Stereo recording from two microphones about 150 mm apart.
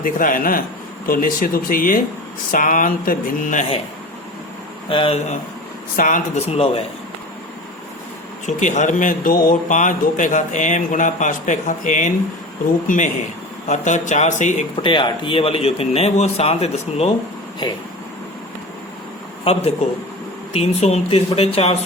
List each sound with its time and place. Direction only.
0.0 s a man's voice: 65° left (ahead or behind)
4.9 s speech: 35° left (ahead or behind)
6.0 s a man's voice: 60° left (ahead or behind)
6.5 s speech: 40° left (ahead or behind)
8.4 s a man's voice: 55° left (ahead or behind)
13.7 s speech: 55° left (ahead or behind)
14.8 s speech: 35° left (ahead or behind)
19.5 s speech: 40° left (ahead or behind)